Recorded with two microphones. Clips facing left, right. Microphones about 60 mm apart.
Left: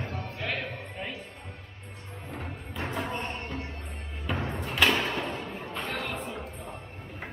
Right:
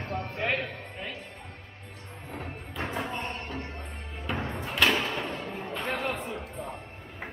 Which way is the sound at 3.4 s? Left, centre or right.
Right.